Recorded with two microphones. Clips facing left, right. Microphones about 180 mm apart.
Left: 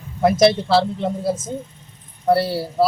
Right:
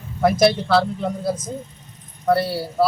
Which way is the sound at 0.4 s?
30° left (ahead or behind).